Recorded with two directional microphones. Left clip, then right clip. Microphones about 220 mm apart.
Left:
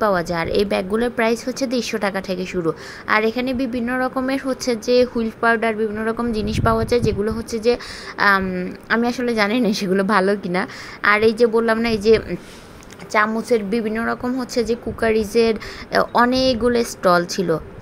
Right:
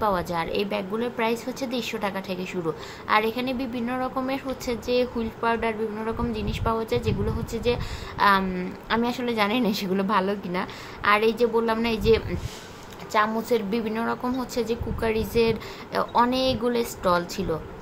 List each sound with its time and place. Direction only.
0.0 s speech: 20° left (ahead or behind)